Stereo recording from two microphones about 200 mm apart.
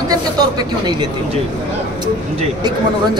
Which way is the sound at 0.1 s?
20° right (ahead or behind).